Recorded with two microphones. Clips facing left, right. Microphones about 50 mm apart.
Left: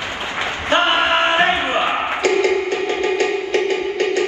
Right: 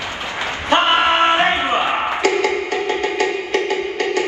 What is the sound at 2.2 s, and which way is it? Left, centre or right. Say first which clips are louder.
Music: left 3 dB; left.